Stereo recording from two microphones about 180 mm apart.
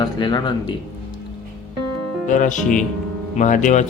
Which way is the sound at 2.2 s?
45° left (ahead or behind).